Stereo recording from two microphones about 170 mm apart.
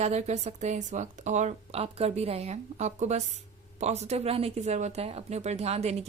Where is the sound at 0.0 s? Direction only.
40° right (ahead or behind).